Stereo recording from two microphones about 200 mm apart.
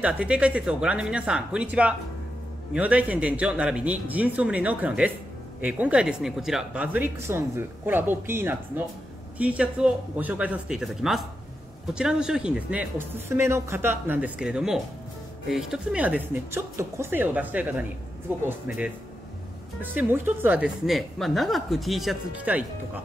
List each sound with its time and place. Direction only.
0.0 s speech: 5° right (ahead or behind)
19.8 s speech: 10° right (ahead or behind)